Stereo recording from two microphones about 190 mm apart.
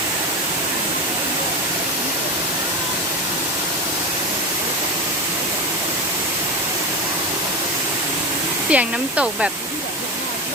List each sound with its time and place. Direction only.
8.7 s speech: 5° right (ahead or behind)